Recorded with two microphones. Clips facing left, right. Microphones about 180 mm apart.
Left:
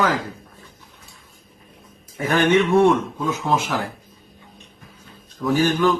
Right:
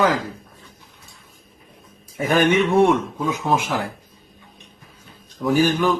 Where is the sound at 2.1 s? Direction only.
15° right (ahead or behind).